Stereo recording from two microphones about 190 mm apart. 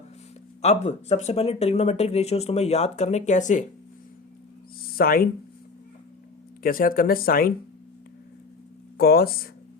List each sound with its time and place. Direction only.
0.6 s speech: 35° left (ahead or behind)
4.9 s speech: 50° left (ahead or behind)
6.6 s speech: 50° left (ahead or behind)
9.0 s speech: 55° left (ahead or behind)